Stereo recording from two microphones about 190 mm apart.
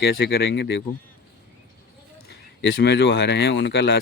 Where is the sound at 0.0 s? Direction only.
60° left (ahead or behind).